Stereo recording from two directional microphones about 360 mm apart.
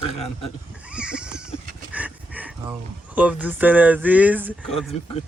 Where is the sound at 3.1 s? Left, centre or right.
Centre.